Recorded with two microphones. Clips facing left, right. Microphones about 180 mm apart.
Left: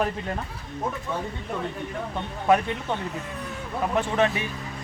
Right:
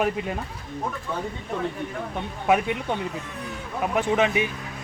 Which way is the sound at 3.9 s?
10° right (ahead or behind).